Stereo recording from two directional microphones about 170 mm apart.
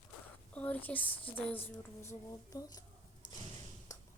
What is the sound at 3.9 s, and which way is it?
Ping, 20° left (ahead or behind).